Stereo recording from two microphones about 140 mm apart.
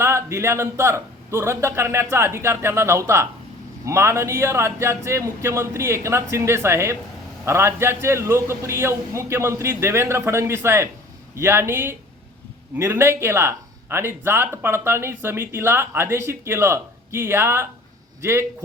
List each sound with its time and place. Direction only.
0.0 s a man's voice: 20° right (ahead or behind)